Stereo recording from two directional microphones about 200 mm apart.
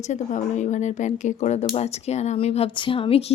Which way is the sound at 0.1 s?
35° left (ahead or behind).